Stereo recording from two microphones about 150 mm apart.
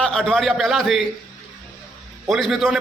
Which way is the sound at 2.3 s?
Centre (ahead or behind).